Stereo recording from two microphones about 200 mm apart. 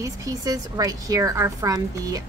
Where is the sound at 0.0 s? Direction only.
20° right (ahead or behind).